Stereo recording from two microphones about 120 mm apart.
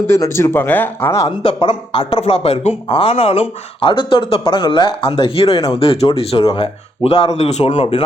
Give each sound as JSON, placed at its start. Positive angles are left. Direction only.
{"t": 0.1, "sound": "speech", "side_deg": 25}
{"t": 1.4, "sound": "speech", "side_deg": 45}
{"t": 2.2, "sound": "a man's voice", "side_deg": 55}